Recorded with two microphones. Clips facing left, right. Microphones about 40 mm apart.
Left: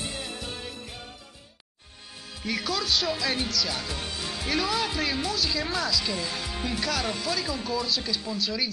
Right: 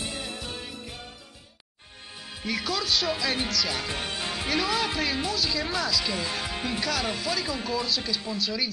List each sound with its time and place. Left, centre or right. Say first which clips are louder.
0.0 s music: even; centre
2.4 s speech: even; centre
3.8 s speech: right 2 dB; right
4.5 s speech: even; centre
6.1 s speech: right 2 dB; centre
6.6 s speech: left 1 dB; centre